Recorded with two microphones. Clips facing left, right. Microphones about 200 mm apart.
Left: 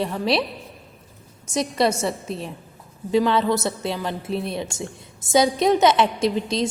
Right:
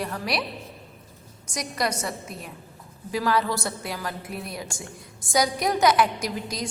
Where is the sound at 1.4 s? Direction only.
25° left (ahead or behind).